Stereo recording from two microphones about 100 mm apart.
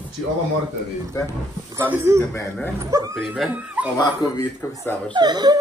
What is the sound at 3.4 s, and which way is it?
Speech, centre (ahead or behind).